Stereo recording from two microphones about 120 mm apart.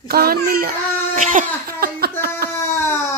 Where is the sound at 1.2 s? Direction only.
90° right.